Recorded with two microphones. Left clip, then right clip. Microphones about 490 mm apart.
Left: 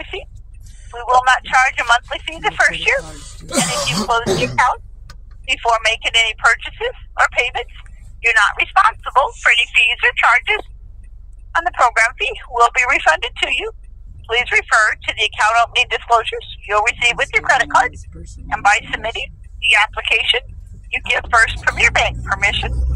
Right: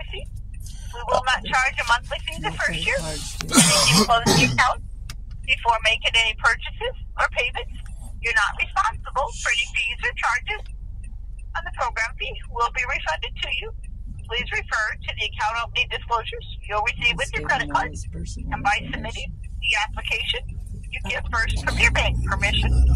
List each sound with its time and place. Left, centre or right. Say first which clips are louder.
0.9 s speech: left 9 dB; centre
4.1 s speech: left 2 dB; centre